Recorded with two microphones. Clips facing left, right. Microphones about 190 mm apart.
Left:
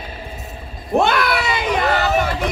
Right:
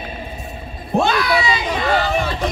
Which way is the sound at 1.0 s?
60° left (ahead or behind).